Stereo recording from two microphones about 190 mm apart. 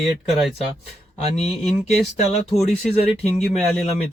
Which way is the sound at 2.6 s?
Centre (ahead or behind).